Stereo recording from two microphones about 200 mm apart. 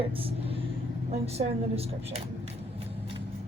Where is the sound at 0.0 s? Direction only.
25° right (ahead or behind).